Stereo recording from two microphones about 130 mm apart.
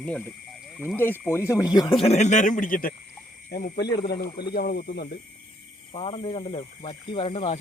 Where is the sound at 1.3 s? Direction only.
20° left (ahead or behind).